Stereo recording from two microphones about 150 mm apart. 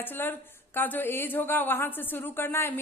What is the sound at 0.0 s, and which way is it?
A woman's voice, 15° left (ahead or behind).